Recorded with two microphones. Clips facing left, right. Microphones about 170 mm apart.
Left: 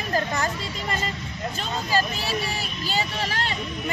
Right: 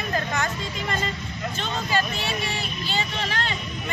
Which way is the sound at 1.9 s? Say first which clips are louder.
Left 2 dB; 35° left (ahead or behind).